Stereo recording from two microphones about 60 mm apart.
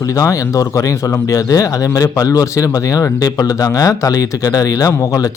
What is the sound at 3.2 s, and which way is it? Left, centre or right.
Speech, left.